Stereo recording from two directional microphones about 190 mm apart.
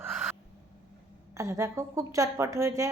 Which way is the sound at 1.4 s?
15° right (ahead or behind).